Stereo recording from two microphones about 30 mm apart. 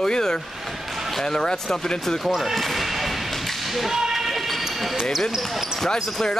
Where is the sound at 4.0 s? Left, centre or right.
Centre.